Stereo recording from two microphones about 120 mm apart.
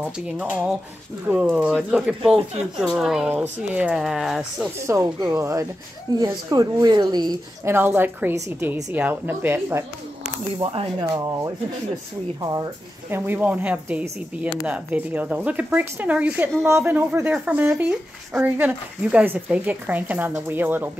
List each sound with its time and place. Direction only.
0.0 s speech: 10° right (ahead or behind)
4.7 s a woman's voice: 25° right (ahead or behind)
7.6 s speech: 20° right (ahead or behind)
10.6 s speech: 45° right (ahead or behind)
11.1 s a woman's voice: 30° right (ahead or behind)
13.1 s speech: 15° right (ahead or behind)